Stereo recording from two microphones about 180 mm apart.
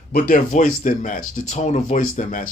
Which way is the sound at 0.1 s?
55° left (ahead or behind).